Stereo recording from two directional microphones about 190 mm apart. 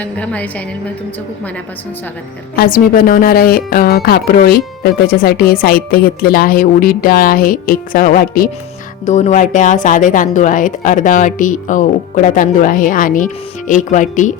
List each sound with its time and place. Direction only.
0.0 s a woman's voice: 5° left (ahead or behind)
2.6 s speech: 50° left (ahead or behind)